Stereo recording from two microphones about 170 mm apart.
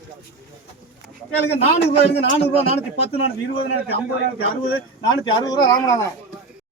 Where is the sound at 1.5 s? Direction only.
40° left (ahead or behind).